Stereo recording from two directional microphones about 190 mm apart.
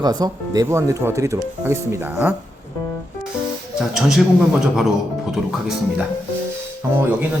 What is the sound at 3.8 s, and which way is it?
Speech, centre (ahead or behind).